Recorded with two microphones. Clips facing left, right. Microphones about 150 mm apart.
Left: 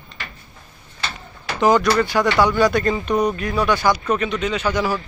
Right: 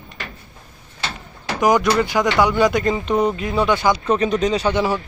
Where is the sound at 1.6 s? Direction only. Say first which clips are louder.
Even; 15° right (ahead or behind).